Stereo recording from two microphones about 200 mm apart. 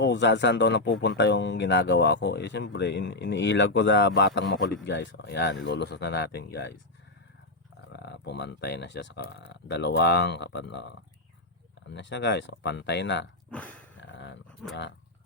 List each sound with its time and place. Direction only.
0.0 s speech: 60° left (ahead or behind)
7.9 s speech: 55° left (ahead or behind)
11.9 s speech: 60° left (ahead or behind)
13.5 s a sound: 5° left (ahead or behind)
14.0 s dog: 65° left (ahead or behind)
14.6 s speech: centre (ahead or behind)